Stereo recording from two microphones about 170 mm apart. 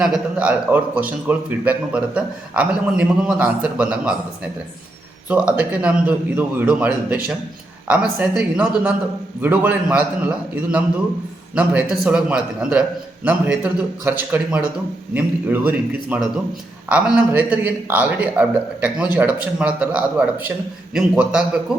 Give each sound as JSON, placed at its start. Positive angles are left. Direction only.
{"t": 0.0, "sound": "a man's voice", "side_deg": -5}
{"t": 5.3, "sound": "a man's voice", "side_deg": -5}
{"t": 8.2, "sound": "a man's voice", "side_deg": -5}
{"t": 11.5, "sound": "a man's voice", "side_deg": -10}